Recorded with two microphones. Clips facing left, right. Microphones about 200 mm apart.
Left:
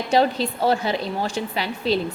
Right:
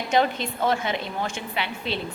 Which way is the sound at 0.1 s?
35° left (ahead or behind).